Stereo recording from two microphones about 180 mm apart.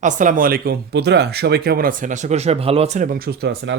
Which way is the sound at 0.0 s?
45° right (ahead or behind).